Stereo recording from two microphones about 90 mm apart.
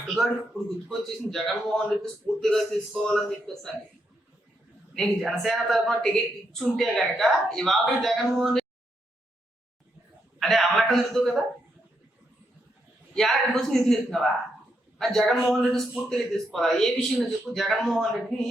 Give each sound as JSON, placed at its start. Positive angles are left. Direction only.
{"t": 0.9, "sound": "a man's voice", "side_deg": 5}
{"t": 4.9, "sound": "a man's voice", "side_deg": 0}
{"t": 10.4, "sound": "a man's voice", "side_deg": 0}
{"t": 13.1, "sound": "a man's voice", "side_deg": 5}